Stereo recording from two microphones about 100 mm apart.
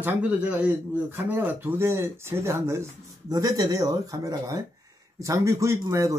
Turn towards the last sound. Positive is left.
turn(degrees=-30)  # may be behind; listen again after turning